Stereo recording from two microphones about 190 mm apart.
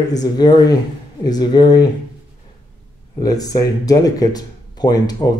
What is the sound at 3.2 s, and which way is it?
Speech, 20° left (ahead or behind).